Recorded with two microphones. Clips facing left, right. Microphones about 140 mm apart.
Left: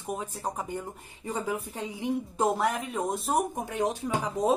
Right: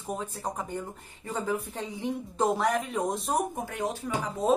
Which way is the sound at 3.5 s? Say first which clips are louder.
Left 3 dB; 20° left (ahead or behind).